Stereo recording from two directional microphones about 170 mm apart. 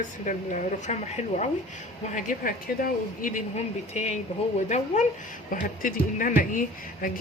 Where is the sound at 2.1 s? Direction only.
55° left (ahead or behind).